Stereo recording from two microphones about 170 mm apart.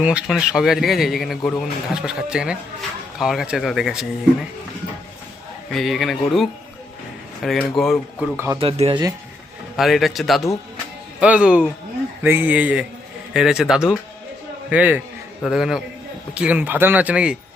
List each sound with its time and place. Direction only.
0.0 s a man's voice: 5° right (ahead or behind)
5.7 s a man's voice: centre (ahead or behind)
8.5 s speech: 35° right (ahead or behind)
9.7 s a man's voice: centre (ahead or behind)